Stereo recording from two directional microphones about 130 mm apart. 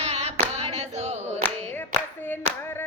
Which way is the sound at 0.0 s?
55° right (ahead or behind).